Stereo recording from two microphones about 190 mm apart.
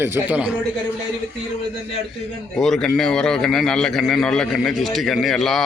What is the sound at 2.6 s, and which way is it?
A man's voice, centre (ahead or behind).